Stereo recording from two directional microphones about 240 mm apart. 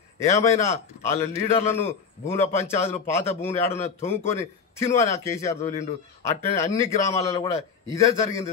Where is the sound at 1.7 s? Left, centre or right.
Centre.